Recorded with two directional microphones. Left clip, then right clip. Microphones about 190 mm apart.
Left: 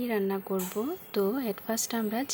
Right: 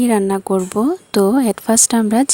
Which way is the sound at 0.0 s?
50° right (ahead or behind).